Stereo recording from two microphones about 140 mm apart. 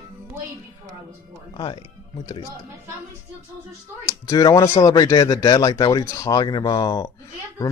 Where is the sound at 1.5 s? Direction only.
35° left (ahead or behind).